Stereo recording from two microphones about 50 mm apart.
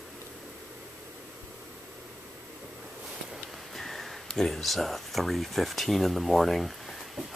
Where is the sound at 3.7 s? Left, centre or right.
Centre.